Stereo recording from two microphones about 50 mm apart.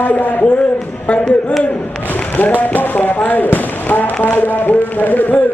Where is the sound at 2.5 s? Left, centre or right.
Left.